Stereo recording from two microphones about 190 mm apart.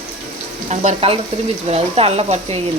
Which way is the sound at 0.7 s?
35° right (ahead or behind).